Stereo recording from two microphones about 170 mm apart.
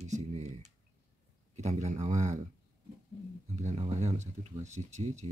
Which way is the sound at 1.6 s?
40° right (ahead or behind).